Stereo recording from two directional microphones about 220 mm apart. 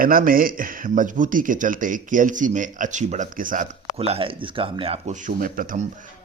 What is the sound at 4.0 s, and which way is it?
Speech, 25° right (ahead or behind).